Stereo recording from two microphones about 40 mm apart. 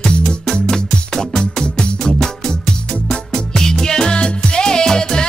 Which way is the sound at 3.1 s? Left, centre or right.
Centre.